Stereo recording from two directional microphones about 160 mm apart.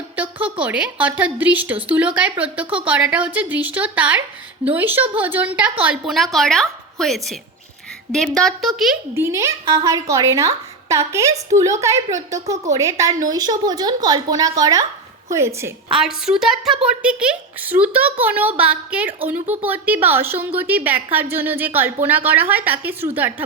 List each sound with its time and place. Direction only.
0.2 s a sound: 10° right (ahead or behind)
0.6 s a woman's voice: 10° right (ahead or behind)
9.1 s a woman's voice: 15° right (ahead or behind)
15.9 s a woman's voice: 5° right (ahead or behind)